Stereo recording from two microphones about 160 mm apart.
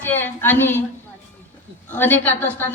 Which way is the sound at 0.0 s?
15° left (ahead or behind).